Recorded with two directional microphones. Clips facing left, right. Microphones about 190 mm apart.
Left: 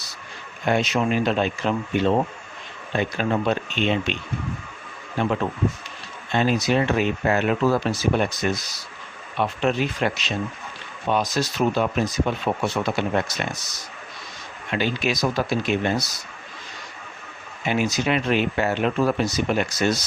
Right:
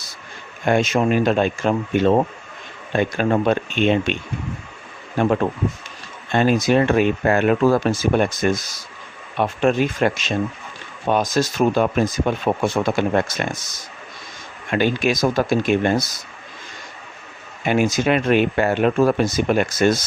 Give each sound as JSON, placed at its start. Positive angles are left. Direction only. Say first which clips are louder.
{"t": 0.6, "sound": "speech", "louder": "right 4 dB", "side_deg": -50}
{"t": 17.7, "sound": "speech", "louder": "right 5 dB", "side_deg": -50}